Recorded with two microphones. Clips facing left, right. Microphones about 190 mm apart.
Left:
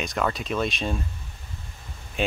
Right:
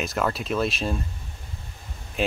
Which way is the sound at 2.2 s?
Centre (ahead or behind).